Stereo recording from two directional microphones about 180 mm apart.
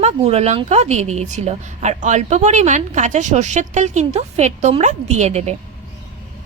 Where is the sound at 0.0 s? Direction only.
35° right (ahead or behind).